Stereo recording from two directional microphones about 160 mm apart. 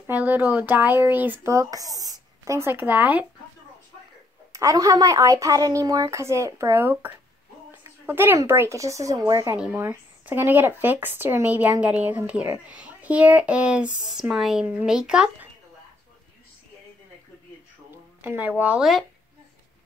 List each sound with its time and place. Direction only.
0.0 s speech: 10° right (ahead or behind)
4.5 s a woman's voice: 20° right (ahead or behind)
18.2 s speech: 10° right (ahead or behind)